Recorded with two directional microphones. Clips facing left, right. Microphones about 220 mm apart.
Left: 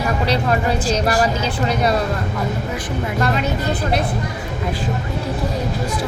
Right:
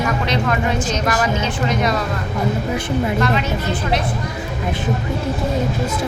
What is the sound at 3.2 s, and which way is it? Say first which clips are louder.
Speech: even; 35° left (ahead or behind).